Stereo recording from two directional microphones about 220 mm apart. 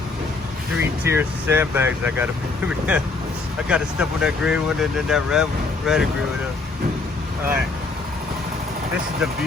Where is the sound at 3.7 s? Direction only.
5° right (ahead or behind).